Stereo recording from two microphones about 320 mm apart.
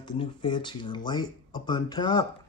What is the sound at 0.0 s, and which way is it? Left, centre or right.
Speech, centre.